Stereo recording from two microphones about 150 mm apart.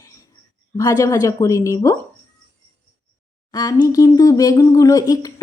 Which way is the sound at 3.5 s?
25° left (ahead or behind).